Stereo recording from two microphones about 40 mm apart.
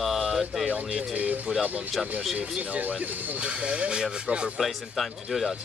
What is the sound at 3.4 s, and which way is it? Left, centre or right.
Speech, right.